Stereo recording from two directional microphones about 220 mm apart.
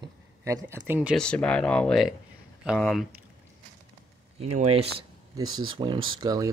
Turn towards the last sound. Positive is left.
turn(degrees=-15)  # may be behind; listen again after turning